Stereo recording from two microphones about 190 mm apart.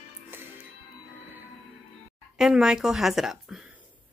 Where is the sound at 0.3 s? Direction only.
10° right (ahead or behind).